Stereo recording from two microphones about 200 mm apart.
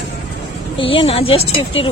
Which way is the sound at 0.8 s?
25° left (ahead or behind).